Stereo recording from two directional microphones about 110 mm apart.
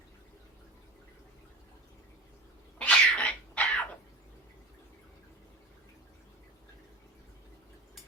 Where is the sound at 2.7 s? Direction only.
10° left (ahead or behind).